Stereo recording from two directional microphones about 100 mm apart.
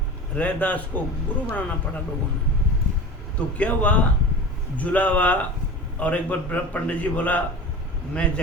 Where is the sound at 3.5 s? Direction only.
15° left (ahead or behind).